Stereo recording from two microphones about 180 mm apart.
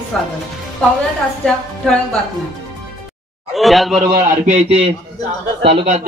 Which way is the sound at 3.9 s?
50° right (ahead or behind).